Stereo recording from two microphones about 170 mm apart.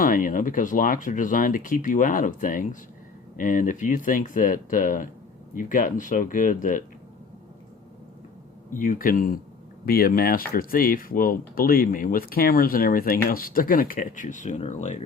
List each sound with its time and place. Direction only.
0.0 s speech: 55° left (ahead or behind)
8.7 s speech: 50° left (ahead or behind)